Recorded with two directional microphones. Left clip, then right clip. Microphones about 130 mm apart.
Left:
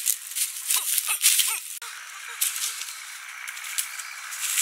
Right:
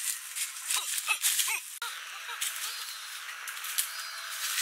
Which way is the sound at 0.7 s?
15° left (ahead or behind).